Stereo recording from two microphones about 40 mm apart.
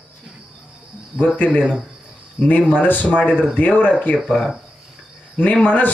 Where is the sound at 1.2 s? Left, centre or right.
Left.